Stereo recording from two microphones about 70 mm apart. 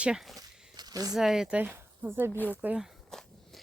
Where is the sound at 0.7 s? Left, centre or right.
Right.